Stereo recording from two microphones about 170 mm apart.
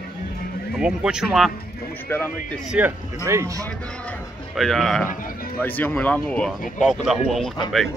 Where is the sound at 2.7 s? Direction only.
15° right (ahead or behind).